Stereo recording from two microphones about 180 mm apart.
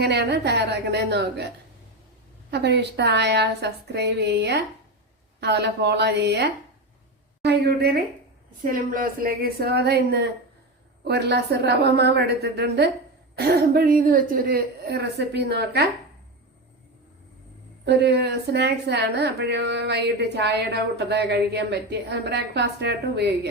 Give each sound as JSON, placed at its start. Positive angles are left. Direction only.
{"t": 0.0, "sound": "a woman's voice", "side_deg": -70}
{"t": 2.5, "sound": "a woman's voice", "side_deg": -70}
{"t": 8.6, "sound": "a woman's voice", "side_deg": -50}
{"t": 17.8, "sound": "a woman's voice", "side_deg": -70}